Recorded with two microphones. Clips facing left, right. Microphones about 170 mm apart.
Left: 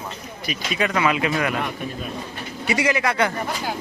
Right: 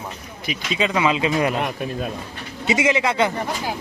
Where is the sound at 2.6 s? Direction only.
20° right (ahead or behind).